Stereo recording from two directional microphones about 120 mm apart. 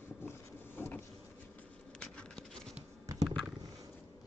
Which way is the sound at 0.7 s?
15° left (ahead or behind).